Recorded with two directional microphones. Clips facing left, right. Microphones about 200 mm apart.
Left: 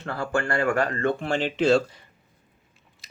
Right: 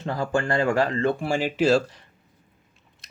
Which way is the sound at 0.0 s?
15° right (ahead or behind).